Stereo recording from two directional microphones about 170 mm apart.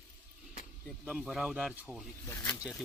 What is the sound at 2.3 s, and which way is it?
Speech, 10° left (ahead or behind).